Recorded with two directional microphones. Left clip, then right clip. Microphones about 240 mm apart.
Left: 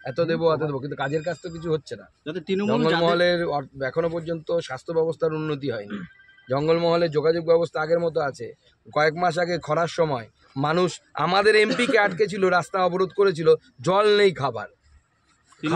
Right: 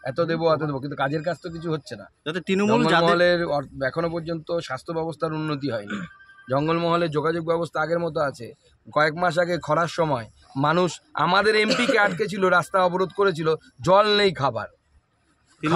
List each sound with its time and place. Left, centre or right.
0.0 s a man's voice: centre
2.2 s speech: right
3.0 s a man's voice: centre